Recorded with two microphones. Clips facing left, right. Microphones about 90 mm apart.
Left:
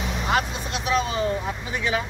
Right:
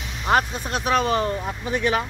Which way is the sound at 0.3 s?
45° right (ahead or behind).